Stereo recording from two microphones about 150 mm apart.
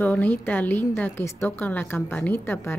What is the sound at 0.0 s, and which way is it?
Speech, 10° left (ahead or behind).